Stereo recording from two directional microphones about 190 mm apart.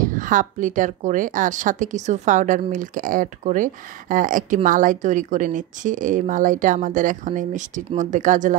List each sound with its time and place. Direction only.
0.0 s speech: 45° right (ahead or behind)